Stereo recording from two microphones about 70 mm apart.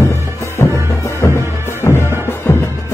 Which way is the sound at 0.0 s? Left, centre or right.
Left.